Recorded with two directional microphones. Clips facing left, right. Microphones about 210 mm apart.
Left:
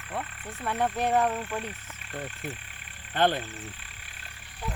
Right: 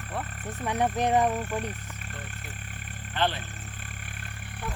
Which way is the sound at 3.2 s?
50° left (ahead or behind).